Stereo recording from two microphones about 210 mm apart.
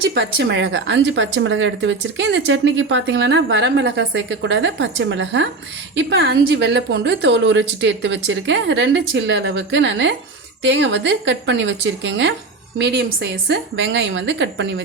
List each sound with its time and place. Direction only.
0.0 s speech: 55° right (ahead or behind)